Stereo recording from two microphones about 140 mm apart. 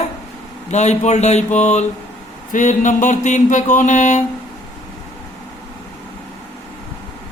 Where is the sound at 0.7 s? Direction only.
55° left (ahead or behind).